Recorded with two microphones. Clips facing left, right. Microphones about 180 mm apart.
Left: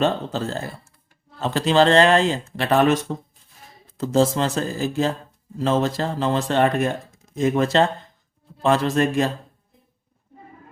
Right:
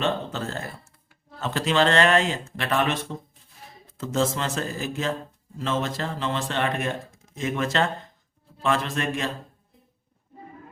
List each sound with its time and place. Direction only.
0.0 s speech: 35° left (ahead or behind)